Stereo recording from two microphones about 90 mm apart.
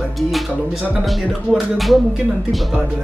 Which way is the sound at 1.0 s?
Centre (ahead or behind).